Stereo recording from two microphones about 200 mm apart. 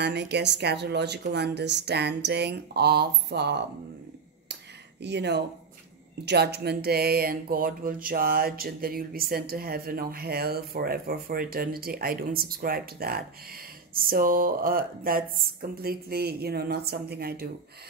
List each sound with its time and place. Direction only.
0.0 s a woman's voice: 55° right (ahead or behind)
5.0 s a woman's voice: 60° right (ahead or behind)